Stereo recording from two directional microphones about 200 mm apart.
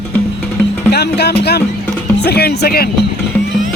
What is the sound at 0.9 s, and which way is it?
Speech, 55° left (ahead or behind).